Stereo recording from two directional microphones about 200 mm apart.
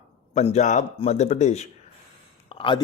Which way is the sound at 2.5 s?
25° left (ahead or behind).